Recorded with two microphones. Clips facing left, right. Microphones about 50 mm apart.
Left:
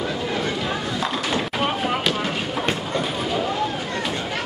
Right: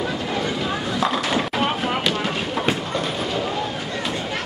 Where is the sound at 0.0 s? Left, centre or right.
Centre.